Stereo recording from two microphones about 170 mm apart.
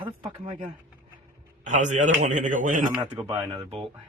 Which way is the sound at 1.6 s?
45° right (ahead or behind).